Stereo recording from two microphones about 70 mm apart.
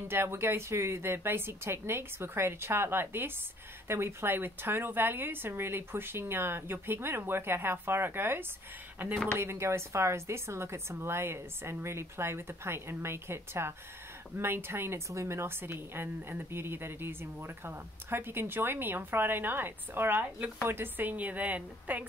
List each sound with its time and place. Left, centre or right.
0.1 s a woman's voice: right